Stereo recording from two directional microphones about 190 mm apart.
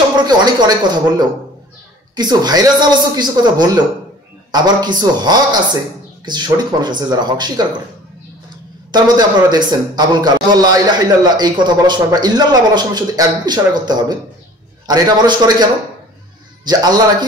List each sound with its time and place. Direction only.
0.6 s a man's voice: 20° right (ahead or behind)
8.9 s a man's voice: 20° right (ahead or behind)